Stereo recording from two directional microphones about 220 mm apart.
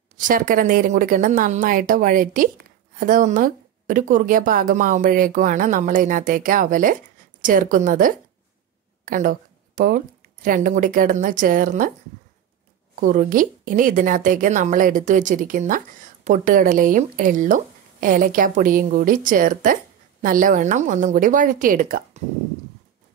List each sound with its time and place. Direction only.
0.3 s a woman's voice: 40° right (ahead or behind)
13.0 s a woman's voice: 40° right (ahead or behind)